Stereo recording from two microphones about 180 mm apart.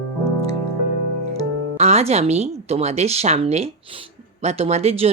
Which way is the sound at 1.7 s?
35° right (ahead or behind).